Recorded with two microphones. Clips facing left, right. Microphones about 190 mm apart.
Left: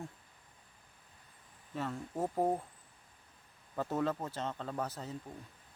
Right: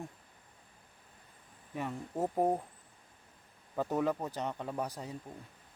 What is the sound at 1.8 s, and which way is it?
Speech, 15° right (ahead or behind).